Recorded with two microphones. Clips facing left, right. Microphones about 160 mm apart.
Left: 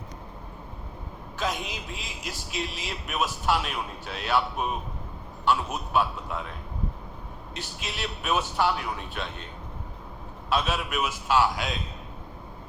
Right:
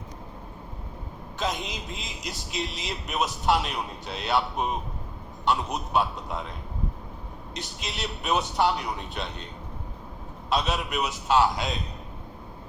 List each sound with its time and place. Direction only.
1.4 s speech: 20° right (ahead or behind)
7.5 s speech: 20° right (ahead or behind)
10.5 s speech: 20° right (ahead or behind)